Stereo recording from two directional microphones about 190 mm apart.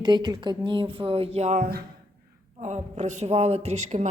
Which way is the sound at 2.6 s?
35° right (ahead or behind).